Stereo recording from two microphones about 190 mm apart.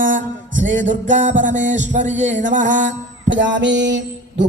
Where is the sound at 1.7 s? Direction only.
40° right (ahead or behind).